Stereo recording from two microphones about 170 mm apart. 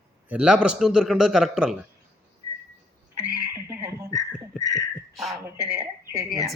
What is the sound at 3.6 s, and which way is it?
Dog, 15° right (ahead or behind).